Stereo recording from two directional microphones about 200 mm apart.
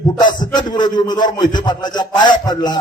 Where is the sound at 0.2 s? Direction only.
20° left (ahead or behind).